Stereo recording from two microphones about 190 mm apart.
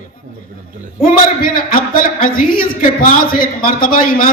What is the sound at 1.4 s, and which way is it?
A man's voice, 45° left (ahead or behind).